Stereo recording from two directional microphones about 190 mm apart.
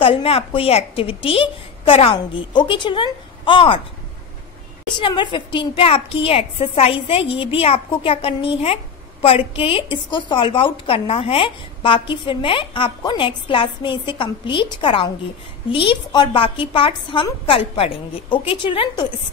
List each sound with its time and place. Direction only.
0.0 s a woman's voice: 30° left (ahead or behind)
5.0 s a woman's voice: 25° left (ahead or behind)